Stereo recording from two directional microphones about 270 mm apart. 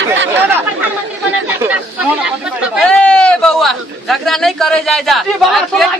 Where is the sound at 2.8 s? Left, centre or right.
Centre.